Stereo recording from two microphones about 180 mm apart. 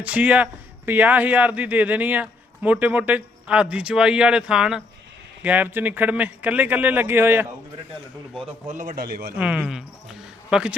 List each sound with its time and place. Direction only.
0.0 s a man's voice: 5° right (ahead or behind)
8.6 s a man's voice: 45° right (ahead or behind)
9.4 s speech: 5° right (ahead or behind)